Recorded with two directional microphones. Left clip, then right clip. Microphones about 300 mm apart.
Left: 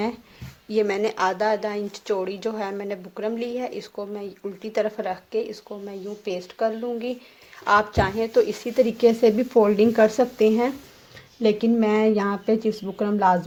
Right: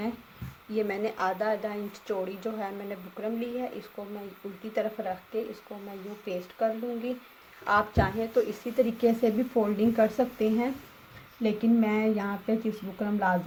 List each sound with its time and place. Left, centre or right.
0.7 s speech: left